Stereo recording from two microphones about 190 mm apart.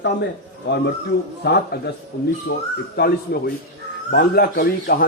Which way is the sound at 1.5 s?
60° left (ahead or behind).